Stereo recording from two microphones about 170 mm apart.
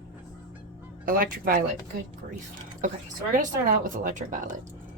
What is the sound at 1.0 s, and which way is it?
Speech, 55° right (ahead or behind).